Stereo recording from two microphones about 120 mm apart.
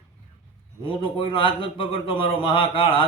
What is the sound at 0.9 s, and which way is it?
A man's voice, 50° left (ahead or behind).